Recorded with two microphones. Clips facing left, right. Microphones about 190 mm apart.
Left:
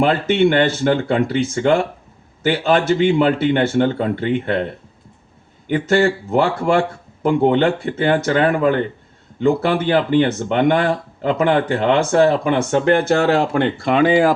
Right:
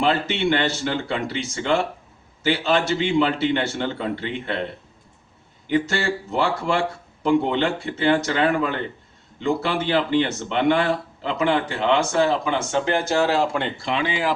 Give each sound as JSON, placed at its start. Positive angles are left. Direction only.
{"t": 0.0, "sound": "speech", "side_deg": 50}
{"t": 5.6, "sound": "speech", "side_deg": 50}